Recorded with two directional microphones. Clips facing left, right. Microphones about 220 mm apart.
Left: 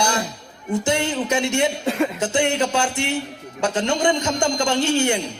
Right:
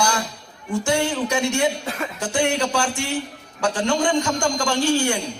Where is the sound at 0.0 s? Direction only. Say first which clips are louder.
Left 1 dB; 20° left (ahead or behind).